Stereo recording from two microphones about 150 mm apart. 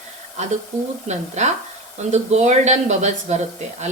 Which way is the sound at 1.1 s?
50° right (ahead or behind).